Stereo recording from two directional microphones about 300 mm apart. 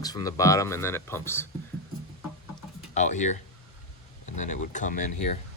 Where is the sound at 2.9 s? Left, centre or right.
Left.